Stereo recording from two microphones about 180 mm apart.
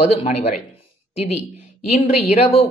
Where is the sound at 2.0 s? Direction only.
35° left (ahead or behind).